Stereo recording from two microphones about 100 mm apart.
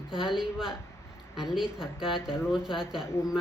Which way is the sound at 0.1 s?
5° right (ahead or behind).